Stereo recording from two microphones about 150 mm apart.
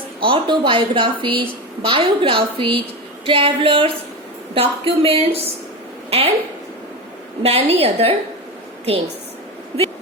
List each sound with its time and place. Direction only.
0.2 s a woman's voice: 35° right (ahead or behind)
7.4 s a woman's voice: 40° right (ahead or behind)